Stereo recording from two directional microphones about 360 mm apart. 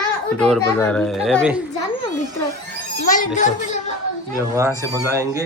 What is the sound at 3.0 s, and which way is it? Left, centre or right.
Speech, left.